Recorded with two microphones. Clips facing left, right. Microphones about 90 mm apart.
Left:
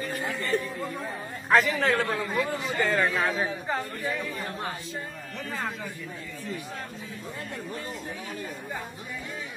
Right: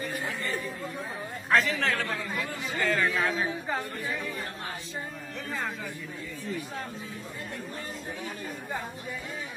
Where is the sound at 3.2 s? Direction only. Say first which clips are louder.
Left 1 dB; 5° left (ahead or behind).